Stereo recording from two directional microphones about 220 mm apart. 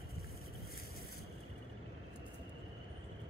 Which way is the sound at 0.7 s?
45° left (ahead or behind).